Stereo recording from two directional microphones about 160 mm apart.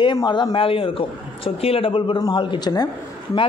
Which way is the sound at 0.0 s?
30° left (ahead or behind).